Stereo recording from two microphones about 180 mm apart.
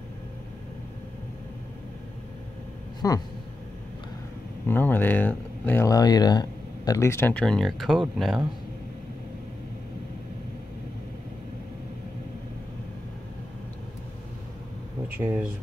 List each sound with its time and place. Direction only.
3.0 s speech: 20° left (ahead or behind)
4.6 s speech: 10° left (ahead or behind)
15.1 s speech: 10° right (ahead or behind)